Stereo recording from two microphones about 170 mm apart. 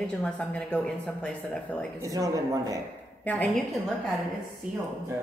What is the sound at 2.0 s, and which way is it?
Speech, 20° right (ahead or behind).